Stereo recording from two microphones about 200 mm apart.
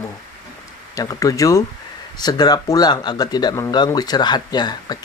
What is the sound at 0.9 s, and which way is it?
Speech, 15° left (ahead or behind).